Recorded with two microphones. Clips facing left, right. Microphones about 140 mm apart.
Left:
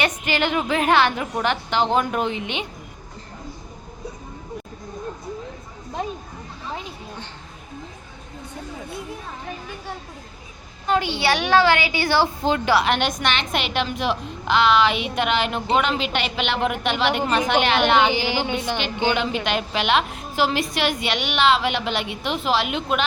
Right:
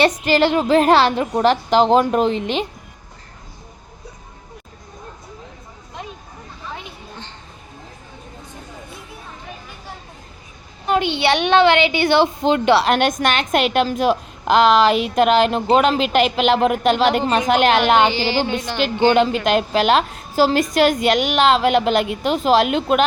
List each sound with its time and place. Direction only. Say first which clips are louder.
0.0 s a woman's voice: right 7 dB; 35° right (ahead or behind)
10.8 s a woman's voice: right 3 dB; 20° right (ahead or behind)
12.8 s a woman's voice: right 5 dB; 45° right (ahead or behind)
18.1 s music: right 3 dB; 15° left (ahead or behind)
19.5 s a woman's voice: right 6 dB; 40° right (ahead or behind)